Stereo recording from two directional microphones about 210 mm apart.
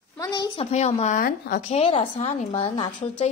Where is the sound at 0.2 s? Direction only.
20° left (ahead or behind); by 1.6 s 40° left (ahead or behind).